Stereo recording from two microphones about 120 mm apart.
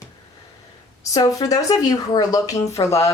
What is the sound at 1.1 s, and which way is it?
Speech, 30° left (ahead or behind).